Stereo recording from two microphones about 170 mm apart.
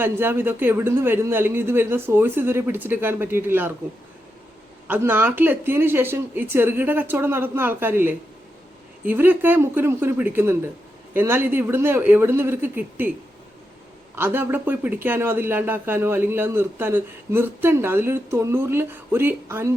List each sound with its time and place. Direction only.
0.0 s speech: 15° right (ahead or behind)
4.9 s speech: 10° right (ahead or behind)
14.2 s speech: 10° right (ahead or behind)